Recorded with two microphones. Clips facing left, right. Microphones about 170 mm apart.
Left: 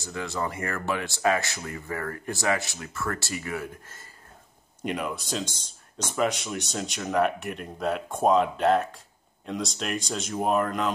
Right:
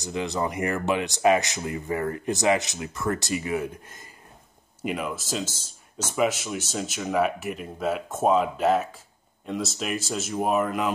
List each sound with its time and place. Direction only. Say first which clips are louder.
0.0 s speech: right 4 dB; 20° right (ahead or behind)
4.8 s speech: right 1 dB; centre (ahead or behind)